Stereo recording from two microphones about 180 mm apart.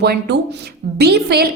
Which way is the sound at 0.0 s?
60° right (ahead or behind).